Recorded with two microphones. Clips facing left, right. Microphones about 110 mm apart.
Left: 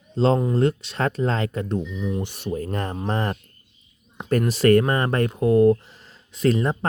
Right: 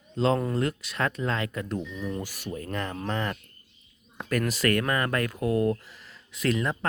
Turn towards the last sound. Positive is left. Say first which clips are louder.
# left 6 dB
turn(degrees=35)  # may be behind; listen again after turning